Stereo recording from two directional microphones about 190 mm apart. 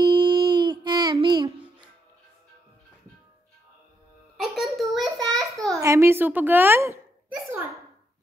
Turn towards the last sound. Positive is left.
turn(degrees=-10)  # may be behind; listen again after turning